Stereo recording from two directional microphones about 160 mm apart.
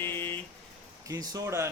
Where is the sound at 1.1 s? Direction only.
20° right (ahead or behind).